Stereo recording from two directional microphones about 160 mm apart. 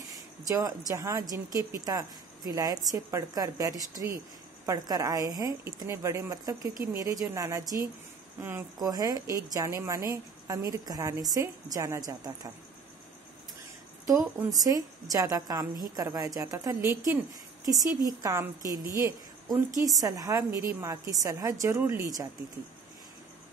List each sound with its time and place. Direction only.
0.1 s speech: 20° right (ahead or behind)
8.7 s speech: 25° right (ahead or behind)
14.0 s speech: 20° right (ahead or behind)